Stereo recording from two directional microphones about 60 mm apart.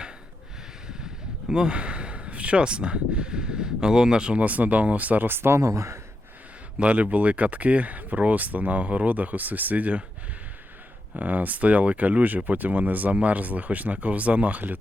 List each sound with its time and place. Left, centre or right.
1.5 s speech: centre; by 5.6 s right
5.6 s speech: right
6.7 s speech: right
11.2 s speech: right